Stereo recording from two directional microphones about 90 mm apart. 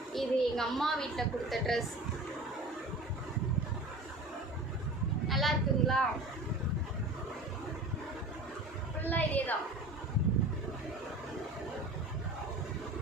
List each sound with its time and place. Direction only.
0.1 s a woman's voice: 5° left (ahead or behind)
5.3 s a sound: centre (ahead or behind)
9.0 s a woman's voice: 20° left (ahead or behind)